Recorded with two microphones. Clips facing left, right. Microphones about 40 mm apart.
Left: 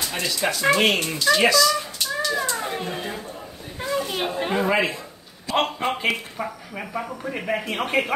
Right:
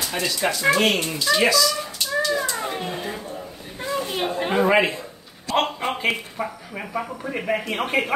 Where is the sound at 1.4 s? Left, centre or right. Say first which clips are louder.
Even; centre.